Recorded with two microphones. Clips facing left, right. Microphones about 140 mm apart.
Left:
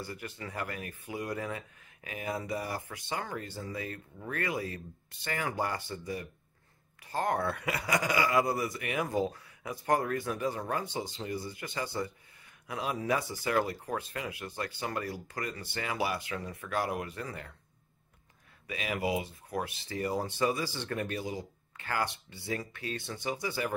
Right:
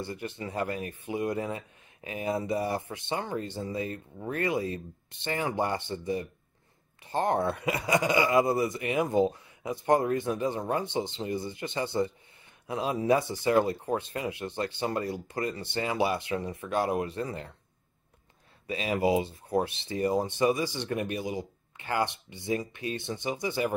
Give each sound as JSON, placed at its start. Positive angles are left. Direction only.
{"t": 0.0, "sound": "a man's voice", "side_deg": -25}
{"t": 18.7, "sound": "a man's voice", "side_deg": -30}